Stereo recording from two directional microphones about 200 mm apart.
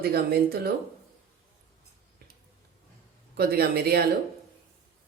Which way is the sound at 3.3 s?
50° right (ahead or behind).